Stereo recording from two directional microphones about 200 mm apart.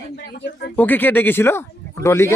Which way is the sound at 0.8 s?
10° left (ahead or behind).